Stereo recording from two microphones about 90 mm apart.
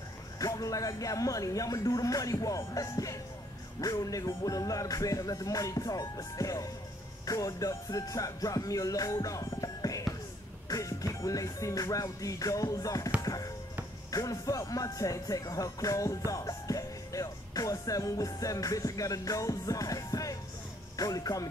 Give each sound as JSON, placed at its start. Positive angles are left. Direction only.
{"t": 0.4, "sound": "music", "side_deg": 40}
{"t": 20.9, "sound": "speech", "side_deg": 45}